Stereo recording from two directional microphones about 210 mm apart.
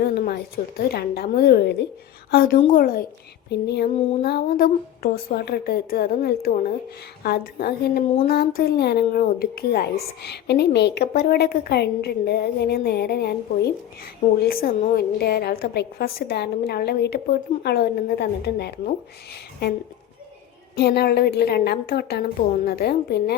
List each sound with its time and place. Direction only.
0.0 s a woman's voice: 50° left (ahead or behind)